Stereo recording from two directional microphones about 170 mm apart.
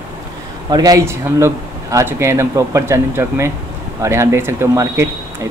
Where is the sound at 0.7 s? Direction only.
20° right (ahead or behind).